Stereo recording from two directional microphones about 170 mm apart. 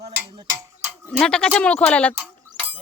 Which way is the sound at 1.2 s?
5° left (ahead or behind).